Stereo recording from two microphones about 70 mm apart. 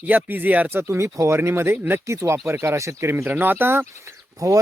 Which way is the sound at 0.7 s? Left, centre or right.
Right.